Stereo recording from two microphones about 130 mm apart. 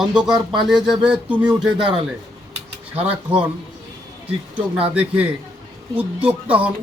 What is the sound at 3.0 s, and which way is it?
Speech, 10° right (ahead or behind).